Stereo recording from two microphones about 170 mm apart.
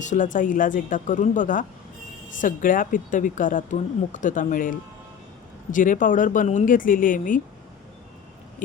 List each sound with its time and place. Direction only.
0.0 s speech: 45° left (ahead or behind)